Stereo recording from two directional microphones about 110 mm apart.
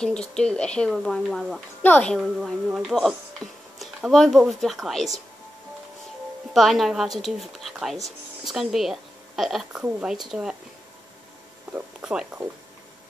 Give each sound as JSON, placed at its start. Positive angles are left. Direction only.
{"t": 0.0, "sound": "speech", "side_deg": 5}
{"t": 1.8, "sound": "speech", "side_deg": 15}
{"t": 2.1, "sound": "speech", "side_deg": 0}
{"t": 6.5, "sound": "speech", "side_deg": 0}
{"t": 11.7, "sound": "speech", "side_deg": -10}